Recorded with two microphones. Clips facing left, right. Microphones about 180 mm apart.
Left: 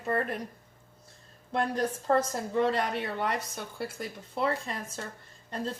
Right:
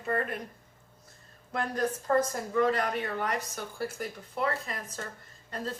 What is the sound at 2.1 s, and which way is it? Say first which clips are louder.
A woman's voice: left 1 dB; 30° left (ahead or behind).